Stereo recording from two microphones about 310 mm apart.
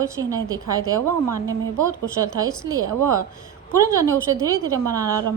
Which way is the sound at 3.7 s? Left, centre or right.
Centre.